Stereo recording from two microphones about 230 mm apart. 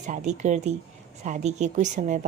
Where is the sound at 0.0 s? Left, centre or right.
Right.